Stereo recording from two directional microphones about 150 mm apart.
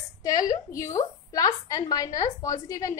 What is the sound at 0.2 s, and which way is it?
A woman's voice, 25° left (ahead or behind).